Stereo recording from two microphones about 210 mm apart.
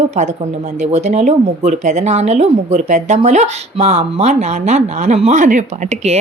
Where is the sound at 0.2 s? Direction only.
35° right (ahead or behind).